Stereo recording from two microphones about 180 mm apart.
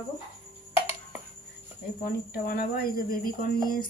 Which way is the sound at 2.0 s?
50° left (ahead or behind).